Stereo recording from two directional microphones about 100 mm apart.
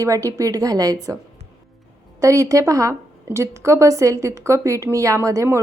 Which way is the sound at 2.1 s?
30° right (ahead or behind).